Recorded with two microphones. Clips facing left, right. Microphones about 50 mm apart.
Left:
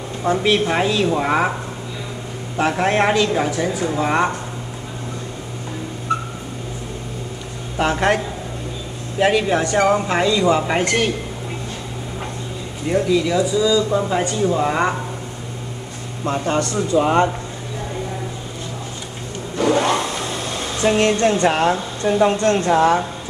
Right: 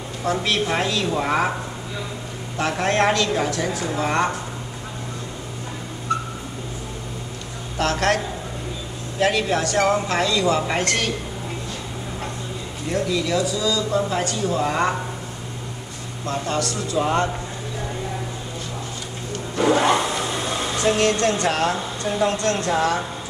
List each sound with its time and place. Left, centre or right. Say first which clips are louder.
0.2 s speech: left 5 dB; centre
7.7 s speech: left 3 dB; centre
9.2 s speech: left 4 dB; centre
12.9 s speech: left 5 dB; centre
16.3 s speech: left 4 dB; left
19.5 s vehicle: even; centre
20.8 s speech: left 4 dB; centre